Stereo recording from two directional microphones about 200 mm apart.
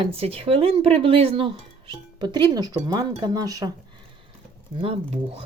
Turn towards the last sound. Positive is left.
turn(degrees=-30)  # may be behind; listen again after turning